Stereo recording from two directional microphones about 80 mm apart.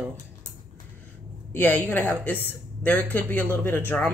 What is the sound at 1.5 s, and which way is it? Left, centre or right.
A woman's voice, left.